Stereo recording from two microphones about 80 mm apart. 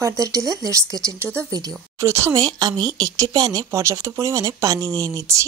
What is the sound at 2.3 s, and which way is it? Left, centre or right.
Speech, right.